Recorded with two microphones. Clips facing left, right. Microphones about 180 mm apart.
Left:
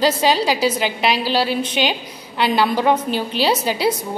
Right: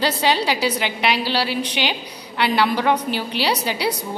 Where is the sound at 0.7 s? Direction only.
20° left (ahead or behind).